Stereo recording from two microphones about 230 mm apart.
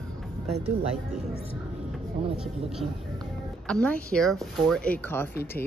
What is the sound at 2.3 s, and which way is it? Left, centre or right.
Speech, centre.